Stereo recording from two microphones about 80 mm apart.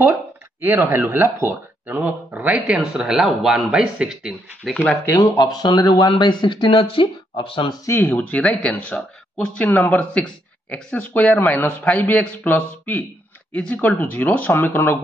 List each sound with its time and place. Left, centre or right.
0.6 s speech: right
2.6 s speech: centre
4.6 s speech: centre
5.1 s speech: left
7.9 s speech: left